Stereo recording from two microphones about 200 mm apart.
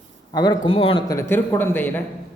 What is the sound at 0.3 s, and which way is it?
A man's voice, 20° left (ahead or behind).